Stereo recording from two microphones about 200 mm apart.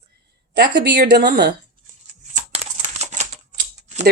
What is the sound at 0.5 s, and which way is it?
Speech, 50° right (ahead or behind).